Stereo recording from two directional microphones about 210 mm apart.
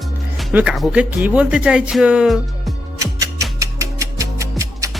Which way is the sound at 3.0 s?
15° right (ahead or behind).